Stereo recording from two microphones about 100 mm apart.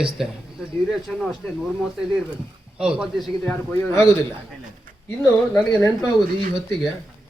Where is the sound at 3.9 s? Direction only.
30° left (ahead or behind).